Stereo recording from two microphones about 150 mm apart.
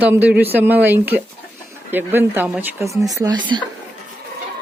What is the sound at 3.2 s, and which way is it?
Speech, 30° right (ahead or behind).